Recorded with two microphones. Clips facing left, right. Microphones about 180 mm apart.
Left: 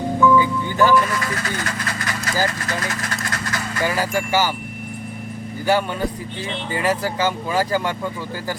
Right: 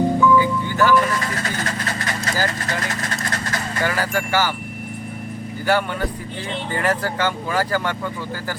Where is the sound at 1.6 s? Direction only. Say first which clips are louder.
Right 1 dB; 25° right (ahead or behind).